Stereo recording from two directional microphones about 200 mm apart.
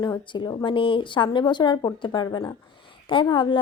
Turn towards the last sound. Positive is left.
turn(degrees=25)  # may be behind; listen again after turning